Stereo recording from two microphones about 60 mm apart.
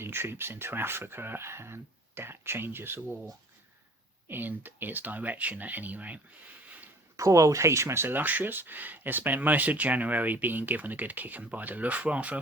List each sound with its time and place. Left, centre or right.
0.0 s speech: right
4.3 s speech: right
7.2 s speech: right